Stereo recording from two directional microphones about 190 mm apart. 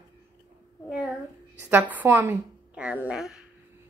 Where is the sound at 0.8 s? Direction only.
5° right (ahead or behind).